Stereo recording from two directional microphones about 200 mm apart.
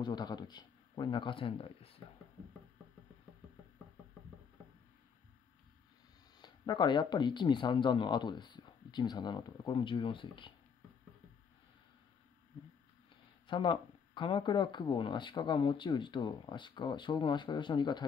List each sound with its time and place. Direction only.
0.0 s speech: 20° left (ahead or behind)
6.3 s speech: 20° left (ahead or behind)
13.1 s speech: 25° left (ahead or behind)